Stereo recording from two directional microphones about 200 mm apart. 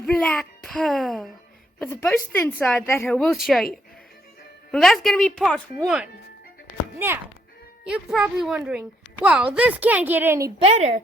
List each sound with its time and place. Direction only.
0.0 s a child's voice: 5° left (ahead or behind)
1.9 s speech: 10° left (ahead or behind)
4.7 s a woman's voice: centre (ahead or behind)
7.9 s a woman's voice: 5° right (ahead or behind)
10.6 s a woman's voice: 30° right (ahead or behind)